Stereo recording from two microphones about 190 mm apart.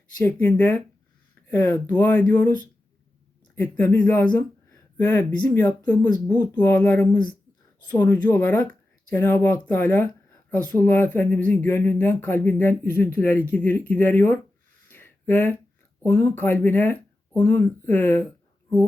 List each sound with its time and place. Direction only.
0.2 s speech: 10° left (ahead or behind)
3.5 s speech: 10° left (ahead or behind)
14.8 s a sound: 10° left (ahead or behind)
16.0 s speech: 10° left (ahead or behind)